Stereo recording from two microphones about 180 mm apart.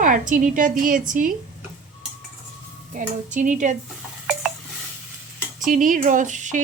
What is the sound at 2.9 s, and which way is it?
Speech, 45° right (ahead or behind).